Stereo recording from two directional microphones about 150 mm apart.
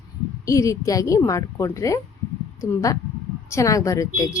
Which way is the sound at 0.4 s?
20° left (ahead or behind).